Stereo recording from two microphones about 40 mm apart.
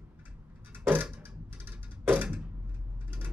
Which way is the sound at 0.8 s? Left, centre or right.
Right.